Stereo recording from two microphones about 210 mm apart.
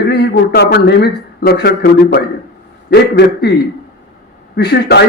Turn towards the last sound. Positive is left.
turn(degrees=50)  # may be behind; listen again after turning